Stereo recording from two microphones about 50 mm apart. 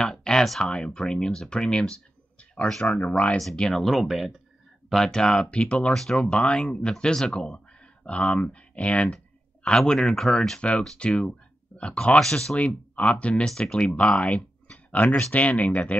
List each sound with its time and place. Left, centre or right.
0.0 s a sound: centre
0.6 s speech: centre
3.5 s speech: centre
3.9 s speech: centre; by 5.9 s left
5.9 s speech: centre
6.3 s speech: left
9.0 s clicking: centre
9.8 s speech: centre
12.5 s speech: left
13.5 s speech: centre; by 16.0 s left